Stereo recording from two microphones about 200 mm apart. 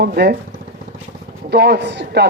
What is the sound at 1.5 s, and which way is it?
Speech, 55° right (ahead or behind).